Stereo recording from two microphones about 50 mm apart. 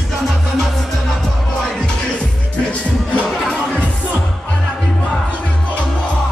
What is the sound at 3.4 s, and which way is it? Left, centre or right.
Music, centre.